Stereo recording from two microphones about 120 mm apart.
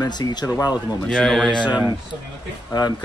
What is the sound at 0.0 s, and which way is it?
Speech, 35° left (ahead or behind).